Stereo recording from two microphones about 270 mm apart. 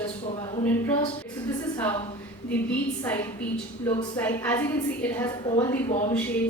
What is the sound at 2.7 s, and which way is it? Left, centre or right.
Speech, centre.